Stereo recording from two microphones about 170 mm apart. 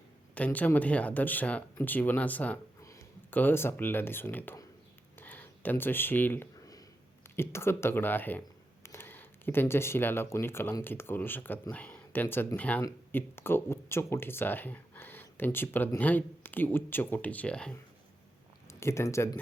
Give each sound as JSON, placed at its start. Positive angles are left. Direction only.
{"t": 0.3, "sound": "speech", "side_deg": 10}
{"t": 5.1, "sound": "a sound", "side_deg": 10}
{"t": 7.3, "sound": "speech", "side_deg": 15}
{"t": 18.7, "sound": "speech", "side_deg": 15}